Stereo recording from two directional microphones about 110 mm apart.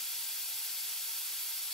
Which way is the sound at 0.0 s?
Centre (ahead or behind).